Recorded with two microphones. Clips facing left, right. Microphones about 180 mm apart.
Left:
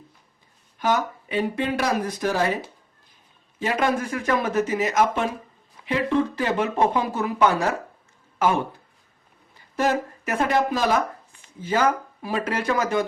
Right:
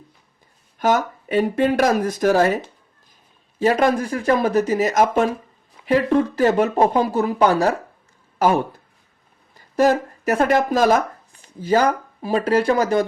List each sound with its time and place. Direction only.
0.8 s speech: 45° right (ahead or behind)
3.6 s speech: 40° right (ahead or behind)
9.7 s speech: 35° right (ahead or behind)